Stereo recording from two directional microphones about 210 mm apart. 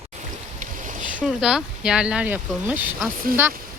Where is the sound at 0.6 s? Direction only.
40° right (ahead or behind).